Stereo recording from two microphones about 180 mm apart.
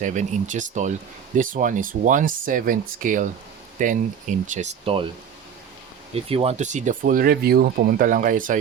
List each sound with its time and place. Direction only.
0.0 s speech: 45° right (ahead or behind)
6.1 s speech: 30° right (ahead or behind); by 8.5 s 50° right (ahead or behind)